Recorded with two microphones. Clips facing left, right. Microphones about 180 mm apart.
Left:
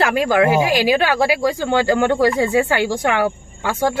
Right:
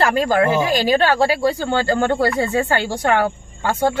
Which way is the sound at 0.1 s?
10° left (ahead or behind).